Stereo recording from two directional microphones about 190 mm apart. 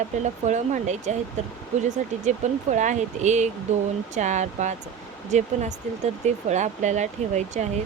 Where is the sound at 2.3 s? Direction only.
40° right (ahead or behind).